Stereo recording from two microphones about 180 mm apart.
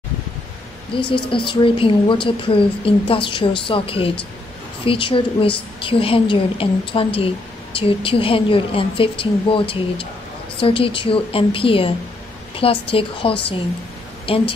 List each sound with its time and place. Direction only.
0.9 s a woman's voice: 30° left (ahead or behind)